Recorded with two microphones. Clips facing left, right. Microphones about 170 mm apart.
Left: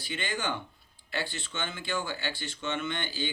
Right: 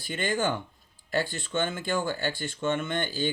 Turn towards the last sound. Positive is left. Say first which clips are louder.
# right 5 dB
turn(degrees=-45)  # may be behind; listen again after turning